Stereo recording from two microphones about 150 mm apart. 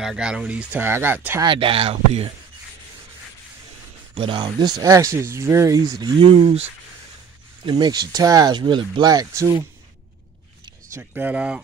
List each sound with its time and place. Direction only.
0.0 s speech: 5° right (ahead or behind)
1.4 s speech: 35° right (ahead or behind)
4.1 s speech: 35° right (ahead or behind)
7.6 s speech: 30° right (ahead or behind)
11.0 s speech: 10° right (ahead or behind)